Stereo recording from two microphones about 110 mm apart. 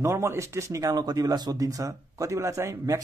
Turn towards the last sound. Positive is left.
turn(degrees=-30)  # may be behind; listen again after turning